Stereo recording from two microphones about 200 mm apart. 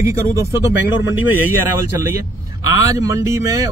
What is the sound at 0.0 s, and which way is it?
Speech, 15° right (ahead or behind).